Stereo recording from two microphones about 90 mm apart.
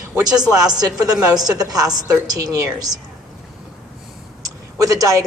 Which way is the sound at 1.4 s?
45° right (ahead or behind).